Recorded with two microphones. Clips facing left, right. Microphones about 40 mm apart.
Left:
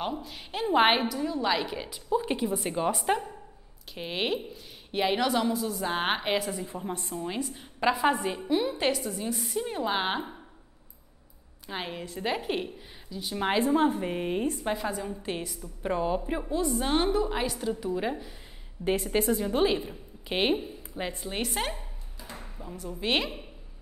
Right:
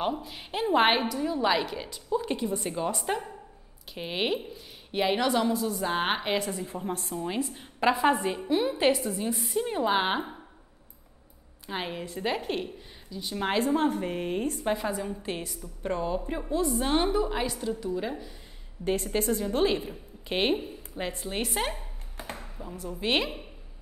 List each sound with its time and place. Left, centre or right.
0.0 s a woman's voice: centre
1.2 s a woman's voice: centre
2.3 s a woman's voice: centre
3.9 s a woman's voice: centre
11.6 s a woman's voice: centre
16.5 s a woman's voice: centre
17.7 s a woman's voice: centre
18.8 s a woman's voice: left
19.1 s a woman's voice: centre
22.1 s ping: right
22.6 s a woman's voice: centre